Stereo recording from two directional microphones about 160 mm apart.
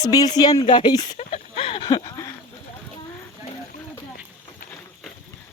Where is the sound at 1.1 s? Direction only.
40° left (ahead or behind); by 2.3 s 20° left (ahead or behind).